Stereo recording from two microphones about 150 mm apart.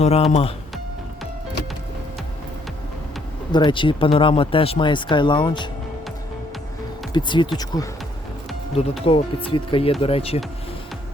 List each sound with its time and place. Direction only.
0.0 s speech: 45° left (ahead or behind)
3.5 s speech: 30° left (ahead or behind)
7.1 s speech: 30° left (ahead or behind)
9.0 s speech: 35° left (ahead or behind)